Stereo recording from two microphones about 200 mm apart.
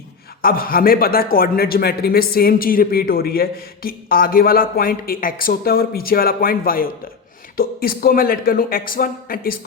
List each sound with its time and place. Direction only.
0.4 s speech: 45° left (ahead or behind)